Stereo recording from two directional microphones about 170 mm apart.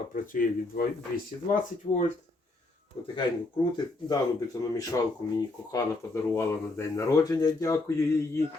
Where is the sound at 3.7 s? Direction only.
20° left (ahead or behind).